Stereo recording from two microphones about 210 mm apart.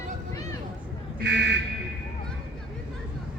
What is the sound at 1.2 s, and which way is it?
Buzzer, 60° right (ahead or behind).